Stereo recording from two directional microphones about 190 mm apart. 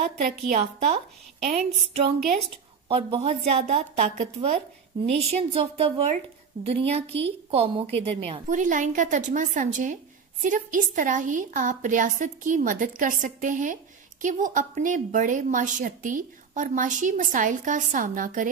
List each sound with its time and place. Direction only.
0.6 s a woman's voice: 30° right (ahead or behind)
8.5 s a woman's voice: 45° right (ahead or behind)